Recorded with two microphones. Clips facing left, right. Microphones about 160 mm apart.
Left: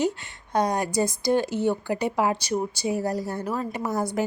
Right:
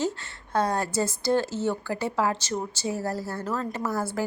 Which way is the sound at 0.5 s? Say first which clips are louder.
Left 2 dB; 15° left (ahead or behind).